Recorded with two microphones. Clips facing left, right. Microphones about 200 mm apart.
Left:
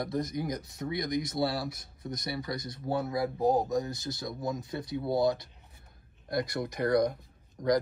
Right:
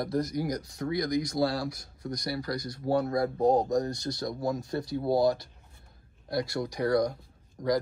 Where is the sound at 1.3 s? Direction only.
5° left (ahead or behind).